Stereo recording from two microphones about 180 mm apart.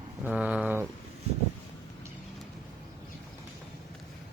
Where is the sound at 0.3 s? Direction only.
5° right (ahead or behind).